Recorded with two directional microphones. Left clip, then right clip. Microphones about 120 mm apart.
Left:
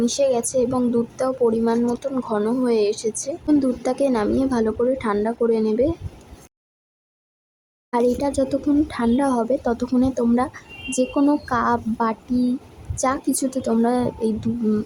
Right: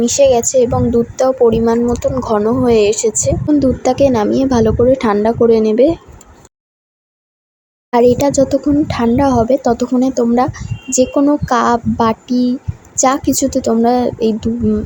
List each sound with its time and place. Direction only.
0.0 s speech: 25° right (ahead or behind)
7.9 s speech: 20° right (ahead or behind)